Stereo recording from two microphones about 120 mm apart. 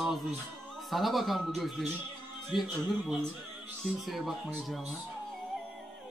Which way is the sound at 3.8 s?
Centre (ahead or behind).